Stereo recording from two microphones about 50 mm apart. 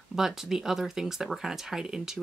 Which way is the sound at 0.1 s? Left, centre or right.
Centre.